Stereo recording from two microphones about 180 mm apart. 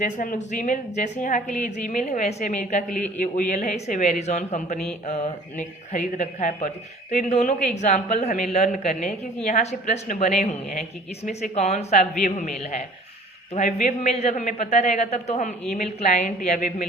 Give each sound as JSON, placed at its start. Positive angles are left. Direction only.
{"t": 0.0, "sound": "speech", "side_deg": 45}